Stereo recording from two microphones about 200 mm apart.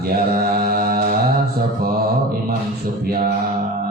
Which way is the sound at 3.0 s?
50° right (ahead or behind).